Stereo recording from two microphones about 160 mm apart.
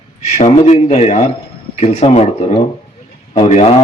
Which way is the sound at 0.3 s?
45° left (ahead or behind).